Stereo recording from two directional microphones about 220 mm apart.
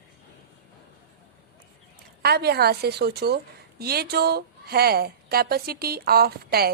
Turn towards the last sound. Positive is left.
turn(degrees=-45)  # may be behind; listen again after turning